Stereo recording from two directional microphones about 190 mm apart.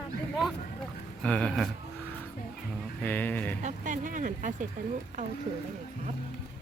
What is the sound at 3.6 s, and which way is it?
Speech, 40° right (ahead or behind).